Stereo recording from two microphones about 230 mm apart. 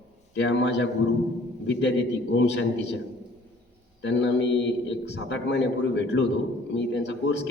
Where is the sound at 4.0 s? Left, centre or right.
Left.